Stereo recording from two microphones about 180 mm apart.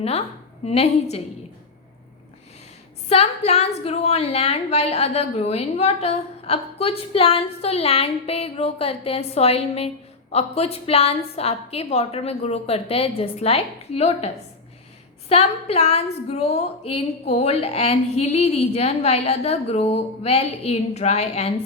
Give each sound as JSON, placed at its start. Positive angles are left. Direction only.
{"t": 0.0, "sound": "a woman's voice", "side_deg": 35}
{"t": 3.1, "sound": "a woman's voice", "side_deg": 35}
{"t": 15.3, "sound": "a woman's voice", "side_deg": 35}